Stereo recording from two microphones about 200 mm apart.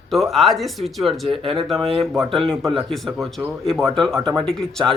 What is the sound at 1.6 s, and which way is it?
A man's voice, centre (ahead or behind).